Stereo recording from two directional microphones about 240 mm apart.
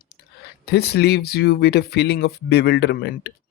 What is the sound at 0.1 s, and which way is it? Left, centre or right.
Speech, left.